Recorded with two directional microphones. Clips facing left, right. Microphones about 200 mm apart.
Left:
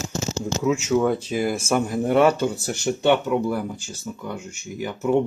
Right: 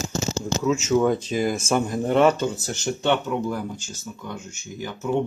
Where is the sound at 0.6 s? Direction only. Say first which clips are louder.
Even; 10° left (ahead or behind).